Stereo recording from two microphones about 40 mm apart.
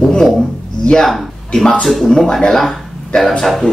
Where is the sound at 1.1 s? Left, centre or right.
Centre.